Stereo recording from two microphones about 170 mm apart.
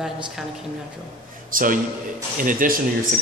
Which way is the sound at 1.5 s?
55° right (ahead or behind).